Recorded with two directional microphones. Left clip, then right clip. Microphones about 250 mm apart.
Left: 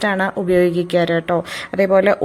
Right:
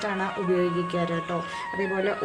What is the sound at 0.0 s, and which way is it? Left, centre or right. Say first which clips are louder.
Speech: left 9 dB; left.